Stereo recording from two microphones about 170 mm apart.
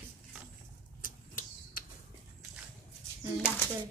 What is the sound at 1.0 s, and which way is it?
Typewriter, 55° left (ahead or behind).